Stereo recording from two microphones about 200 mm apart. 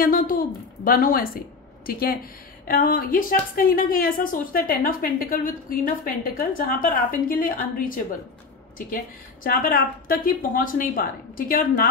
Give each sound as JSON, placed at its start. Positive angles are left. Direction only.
{"t": 0.0, "sound": "a woman's voice", "side_deg": 45}